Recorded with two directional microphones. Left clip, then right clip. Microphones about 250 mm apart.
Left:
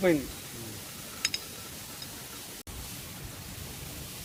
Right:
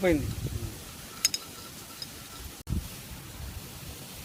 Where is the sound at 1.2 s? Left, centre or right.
Right.